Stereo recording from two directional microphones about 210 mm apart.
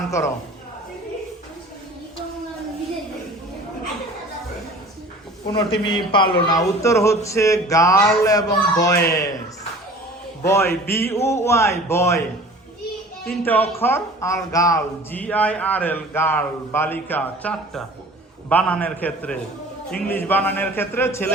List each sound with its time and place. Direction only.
5.5 s a man's voice: 25° left (ahead or behind)
10.4 s a man's voice: 10° left (ahead or behind)
13.4 s a man's voice: 10° left (ahead or behind)